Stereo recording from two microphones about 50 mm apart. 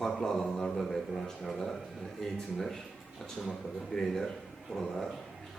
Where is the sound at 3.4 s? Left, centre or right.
Centre.